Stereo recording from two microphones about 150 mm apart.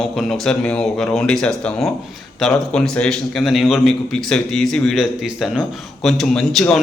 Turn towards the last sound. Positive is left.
turn(degrees=0)  # may be behind; listen again after turning